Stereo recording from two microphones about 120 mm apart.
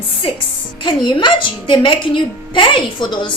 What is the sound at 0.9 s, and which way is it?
A woman's voice, 40° left (ahead or behind).